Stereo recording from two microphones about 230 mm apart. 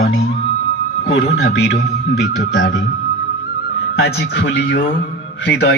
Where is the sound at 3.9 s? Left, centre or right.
Left.